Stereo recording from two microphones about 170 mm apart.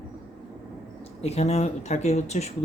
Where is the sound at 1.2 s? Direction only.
40° left (ahead or behind).